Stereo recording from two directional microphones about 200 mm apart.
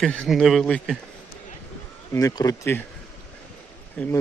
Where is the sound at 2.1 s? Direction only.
15° left (ahead or behind).